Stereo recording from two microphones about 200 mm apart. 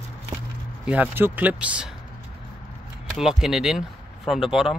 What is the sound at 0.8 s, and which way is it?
Speech, 10° right (ahead or behind).